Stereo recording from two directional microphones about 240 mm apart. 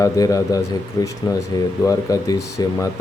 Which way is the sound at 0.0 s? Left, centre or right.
Centre.